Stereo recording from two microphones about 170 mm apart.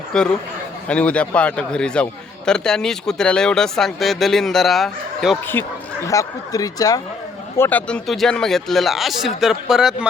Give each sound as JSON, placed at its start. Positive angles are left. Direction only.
{"t": 0.1, "sound": "a man's voice", "side_deg": 5}
{"t": 6.1, "sound": "speech", "side_deg": 20}